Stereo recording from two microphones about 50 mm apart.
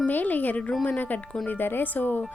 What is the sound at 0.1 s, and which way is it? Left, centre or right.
A woman's voice, left.